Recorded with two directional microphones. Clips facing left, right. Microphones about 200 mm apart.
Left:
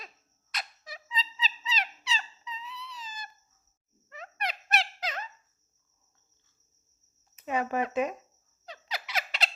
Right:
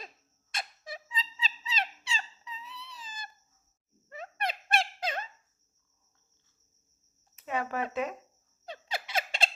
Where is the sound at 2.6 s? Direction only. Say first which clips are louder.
Left 3 dB; 55° right (ahead or behind).